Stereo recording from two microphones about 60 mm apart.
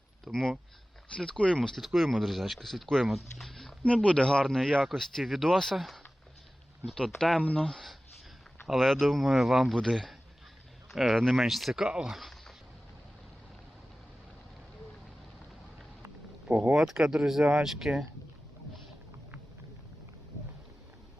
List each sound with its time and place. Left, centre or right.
0.3 s speech: centre
3.8 s speech: centre
7.2 s speech: centre
7.5 s speech: centre
11.2 s speech: centre
11.4 s speech: centre
12.0 s a sound: centre
16.5 s speech: right
16.7 s speech: centre